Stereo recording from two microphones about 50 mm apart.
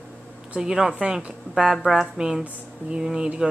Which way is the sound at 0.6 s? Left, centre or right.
Centre.